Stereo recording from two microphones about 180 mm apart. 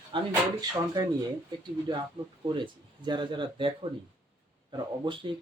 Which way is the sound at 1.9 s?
25° right (ahead or behind).